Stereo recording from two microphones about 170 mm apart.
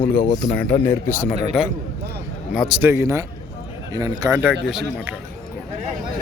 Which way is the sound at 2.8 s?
15° right (ahead or behind).